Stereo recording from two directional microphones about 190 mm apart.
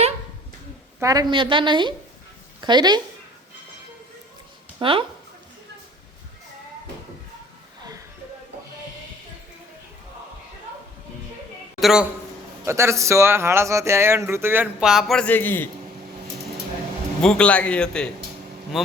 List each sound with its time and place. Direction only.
0.9 s a woman's voice: 20° right (ahead or behind)
4.8 s a woman's voice: 25° right (ahead or behind)
11.8 s a woman's voice: centre (ahead or behind)
12.6 s speech: 15° right (ahead or behind); by 15.7 s 10° left (ahead or behind)
17.2 s speech: 5° left (ahead or behind)